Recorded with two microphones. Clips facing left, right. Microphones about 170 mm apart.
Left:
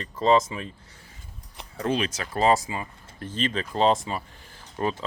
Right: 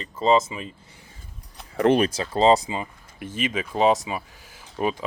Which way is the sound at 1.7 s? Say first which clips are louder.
Right 8 dB; 80° right.